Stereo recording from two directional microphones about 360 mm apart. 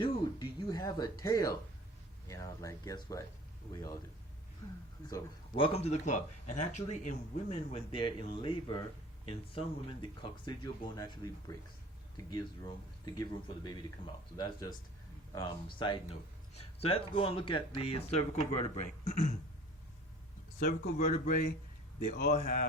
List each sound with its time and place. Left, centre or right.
0.0 s a sound: centre
2.2 s speech: centre
5.0 s speech: centre
14.3 s speech: centre
20.6 s speech: left